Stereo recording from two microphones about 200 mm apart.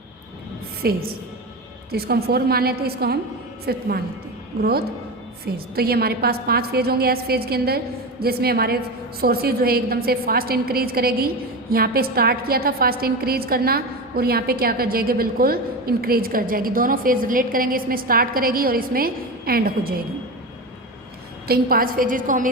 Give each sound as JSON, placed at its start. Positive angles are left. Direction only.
{"t": 0.8, "sound": "a woman's voice", "side_deg": -50}
{"t": 5.7, "sound": "a woman's voice", "side_deg": -50}
{"t": 21.4, "sound": "a woman's voice", "side_deg": -50}